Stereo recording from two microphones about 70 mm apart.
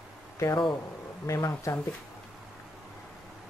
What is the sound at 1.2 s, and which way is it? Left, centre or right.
Speech, left.